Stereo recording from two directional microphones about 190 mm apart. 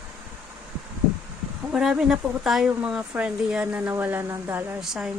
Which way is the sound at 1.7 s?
Centre (ahead or behind).